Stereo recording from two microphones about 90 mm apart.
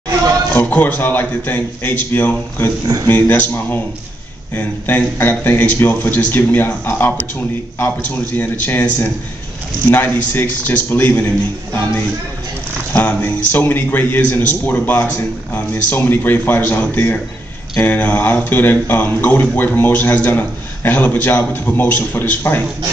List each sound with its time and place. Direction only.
0.5 s a man's voice: 20° left (ahead or behind)
12.9 s a man's voice: 20° left (ahead or behind)